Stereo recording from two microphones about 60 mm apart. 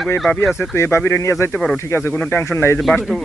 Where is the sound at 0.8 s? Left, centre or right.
Left.